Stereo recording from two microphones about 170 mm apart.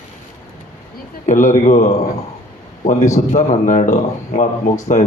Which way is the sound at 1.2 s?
50° left (ahead or behind).